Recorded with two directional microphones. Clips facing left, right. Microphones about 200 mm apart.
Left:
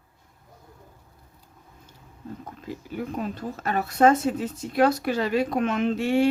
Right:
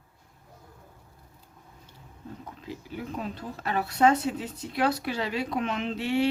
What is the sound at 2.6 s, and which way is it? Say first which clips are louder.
Speech: left 5 dB; 50° left (ahead or behind).